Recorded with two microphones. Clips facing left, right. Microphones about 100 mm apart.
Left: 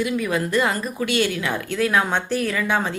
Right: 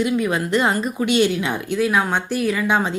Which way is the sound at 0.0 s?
20° right (ahead or behind).